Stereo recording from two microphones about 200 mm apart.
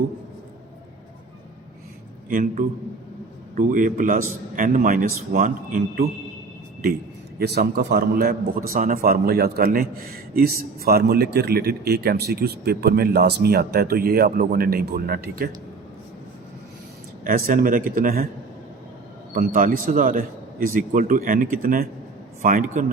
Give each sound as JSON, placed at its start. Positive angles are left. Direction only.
{"t": 2.3, "sound": "a man's voice", "side_deg": -45}
{"t": 7.3, "sound": "a man's voice", "side_deg": -50}
{"t": 17.2, "sound": "a man's voice", "side_deg": -45}
{"t": 19.3, "sound": "a man's voice", "side_deg": -45}